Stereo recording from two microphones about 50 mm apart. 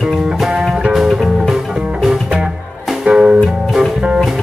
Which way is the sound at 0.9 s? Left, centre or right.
Centre.